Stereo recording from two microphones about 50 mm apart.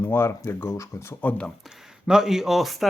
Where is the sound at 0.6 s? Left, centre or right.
Left.